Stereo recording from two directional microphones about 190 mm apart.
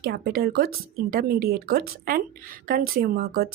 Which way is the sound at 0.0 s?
55° right (ahead or behind).